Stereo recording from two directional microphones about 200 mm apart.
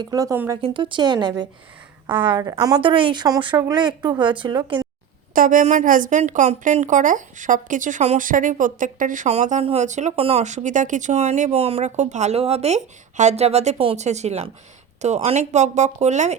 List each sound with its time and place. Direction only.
0.0 s speech: 15° right (ahead or behind)
0.6 s speech: 25° right (ahead or behind)
5.3 s a woman's voice: 45° right (ahead or behind)